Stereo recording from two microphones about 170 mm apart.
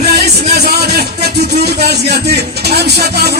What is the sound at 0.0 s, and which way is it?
Music, 65° right (ahead or behind).